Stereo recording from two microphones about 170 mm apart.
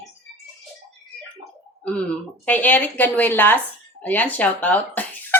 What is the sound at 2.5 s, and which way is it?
Speech, 10° left (ahead or behind).